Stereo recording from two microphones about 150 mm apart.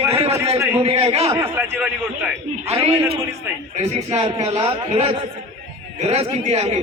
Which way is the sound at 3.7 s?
50° right (ahead or behind).